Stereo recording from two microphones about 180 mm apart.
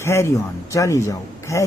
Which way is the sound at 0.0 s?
15° left (ahead or behind).